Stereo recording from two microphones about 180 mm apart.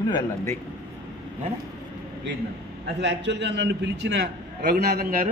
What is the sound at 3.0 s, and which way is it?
A man's voice, 70° right (ahead or behind).